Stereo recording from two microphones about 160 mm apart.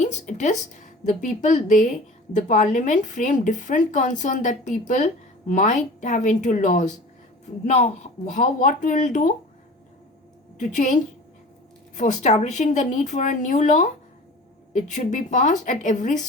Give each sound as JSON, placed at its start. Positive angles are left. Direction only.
{"t": 0.0, "sound": "a woman's voice", "side_deg": 45}
{"t": 10.6, "sound": "a woman's voice", "side_deg": 50}
{"t": 11.9, "sound": "a woman's voice", "side_deg": 45}